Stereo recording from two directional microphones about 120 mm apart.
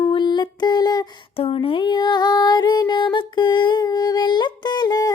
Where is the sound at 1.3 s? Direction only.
50° left (ahead or behind).